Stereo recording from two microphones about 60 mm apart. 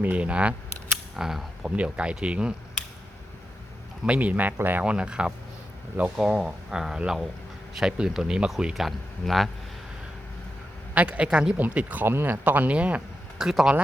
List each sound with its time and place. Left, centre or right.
0.0 s speech: right
1.1 s speech: centre
1.7 s speech: right
4.0 s speech: right
4.9 s speech: centre
6.3 s speech: centre
10.9 s speech: right
11.3 s speech: centre
11.5 s speech: right
12.0 s speech: right
13.4 s speech: centre